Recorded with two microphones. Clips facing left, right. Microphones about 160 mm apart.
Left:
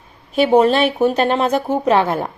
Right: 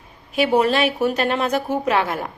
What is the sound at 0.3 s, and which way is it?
A woman's voice, 30° left (ahead or behind).